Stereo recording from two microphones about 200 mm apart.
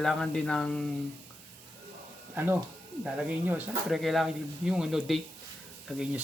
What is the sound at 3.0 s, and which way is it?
Speech, 5° right (ahead or behind).